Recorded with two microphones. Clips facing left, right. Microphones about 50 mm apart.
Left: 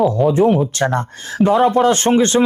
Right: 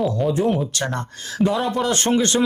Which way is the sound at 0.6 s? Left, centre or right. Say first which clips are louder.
Left 7 dB; left.